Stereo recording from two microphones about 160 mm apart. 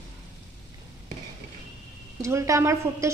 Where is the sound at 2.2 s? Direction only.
20° right (ahead or behind).